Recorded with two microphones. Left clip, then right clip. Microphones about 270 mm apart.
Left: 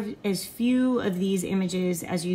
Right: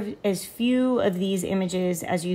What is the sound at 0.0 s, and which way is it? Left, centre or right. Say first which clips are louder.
Speech: right 3 dB; right.